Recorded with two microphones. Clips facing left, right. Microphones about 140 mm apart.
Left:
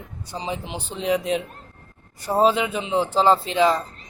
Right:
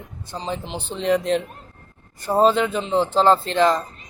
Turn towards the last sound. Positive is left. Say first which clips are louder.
# right 1 dB
turn(degrees=5)  # may be behind; listen again after turning